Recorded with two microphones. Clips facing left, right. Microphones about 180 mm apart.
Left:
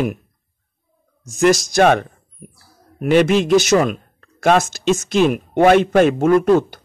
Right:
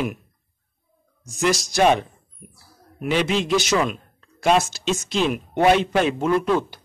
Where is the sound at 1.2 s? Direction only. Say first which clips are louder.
Left 7 dB; 50° left (ahead or behind).